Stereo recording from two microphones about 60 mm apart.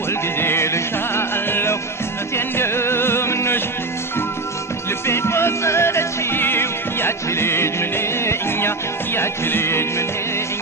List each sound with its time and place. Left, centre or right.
0.1 s music: left
5.0 s music: left